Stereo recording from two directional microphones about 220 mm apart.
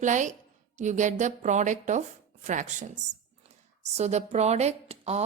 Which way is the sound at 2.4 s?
35° right (ahead or behind).